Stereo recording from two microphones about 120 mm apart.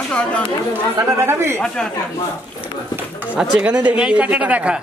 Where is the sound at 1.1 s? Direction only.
20° right (ahead or behind).